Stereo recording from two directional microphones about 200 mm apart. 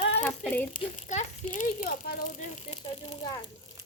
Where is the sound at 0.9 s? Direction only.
35° left (ahead or behind).